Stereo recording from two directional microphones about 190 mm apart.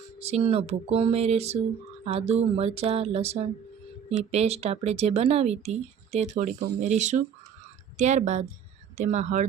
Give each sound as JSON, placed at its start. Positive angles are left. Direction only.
{"t": 0.2, "sound": "speech", "side_deg": -35}